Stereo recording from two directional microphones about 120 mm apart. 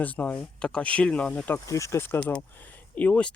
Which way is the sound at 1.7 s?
25° left (ahead or behind).